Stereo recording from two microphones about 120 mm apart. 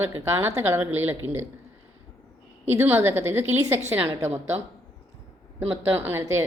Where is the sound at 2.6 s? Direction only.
20° right (ahead or behind).